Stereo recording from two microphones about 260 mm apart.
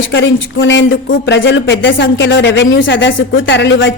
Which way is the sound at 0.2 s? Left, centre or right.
Left.